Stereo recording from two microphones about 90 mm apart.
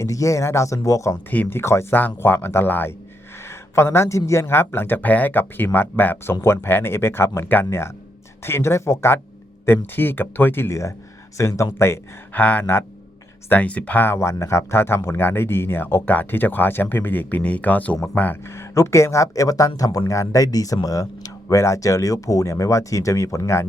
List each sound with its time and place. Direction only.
0.0 s speech: 35° left (ahead or behind)
1.3 s speech: 20° left (ahead or behind)
12.3 s speech: 15° left (ahead or behind)
14.2 s speech: 30° left (ahead or behind)
18.4 s speech: 30° left (ahead or behind)